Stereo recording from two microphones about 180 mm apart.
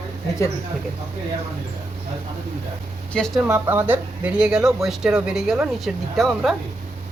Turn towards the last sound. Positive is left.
turn(degrees=0)  # may be behind; listen again after turning